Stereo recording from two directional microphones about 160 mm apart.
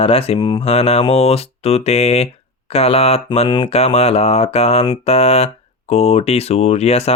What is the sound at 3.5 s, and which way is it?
Speech, 30° left (ahead or behind).